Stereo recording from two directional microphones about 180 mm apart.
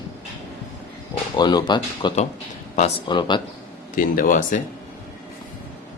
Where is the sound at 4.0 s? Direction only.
50° left (ahead or behind).